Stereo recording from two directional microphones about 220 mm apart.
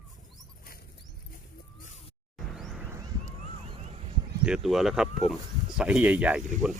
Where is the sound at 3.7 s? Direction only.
30° right (ahead or behind).